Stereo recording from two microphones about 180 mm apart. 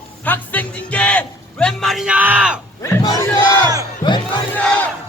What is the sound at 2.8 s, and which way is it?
Crowd, 15° left (ahead or behind).